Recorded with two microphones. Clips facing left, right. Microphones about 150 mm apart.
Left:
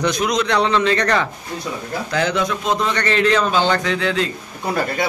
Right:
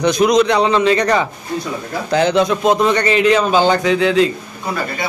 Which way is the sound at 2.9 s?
10° right (ahead or behind).